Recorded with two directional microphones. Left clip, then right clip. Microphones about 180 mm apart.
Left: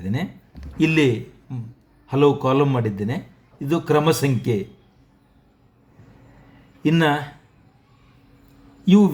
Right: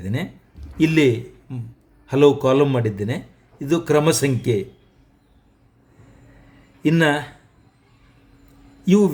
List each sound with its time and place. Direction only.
0.0 s a man's voice: 15° right (ahead or behind)
6.8 s a man's voice: 15° right (ahead or behind)
8.8 s speech: 15° right (ahead or behind)